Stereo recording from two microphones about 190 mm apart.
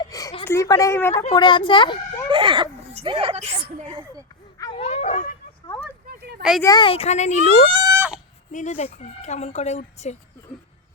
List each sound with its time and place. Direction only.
0.0 s a woman's voice: 20° left (ahead or behind)
1.3 s a child's voice: 25° left (ahead or behind)
2.3 s a sound: 25° right (ahead or behind)
3.8 s speech: 25° right (ahead or behind)
4.5 s dog: 20° left (ahead or behind)
4.8 s dog: 35° left (ahead or behind)
6.1 s a sound: 55° right (ahead or behind)
6.6 s speech: 20° left (ahead or behind); by 7.7 s 40° left (ahead or behind)
7.7 s a sound: 20° right (ahead or behind)
8.5 s speech: 40° left (ahead or behind)